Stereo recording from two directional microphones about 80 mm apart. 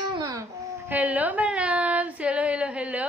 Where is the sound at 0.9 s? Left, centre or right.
Centre.